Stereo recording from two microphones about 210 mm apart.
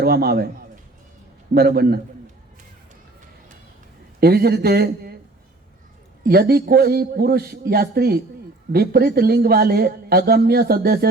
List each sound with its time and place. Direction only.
0.0 s a man's voice: 50° right (ahead or behind)
1.5 s a man's voice: 50° right (ahead or behind)
4.2 s a man's voice: 50° right (ahead or behind)
6.2 s a man's voice: 45° right (ahead or behind)